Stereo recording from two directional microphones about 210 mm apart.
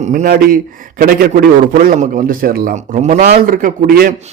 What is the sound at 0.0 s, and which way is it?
A man's voice, 35° right (ahead or behind).